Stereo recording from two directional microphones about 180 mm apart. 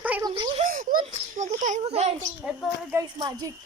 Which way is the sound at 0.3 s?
25° right (ahead or behind).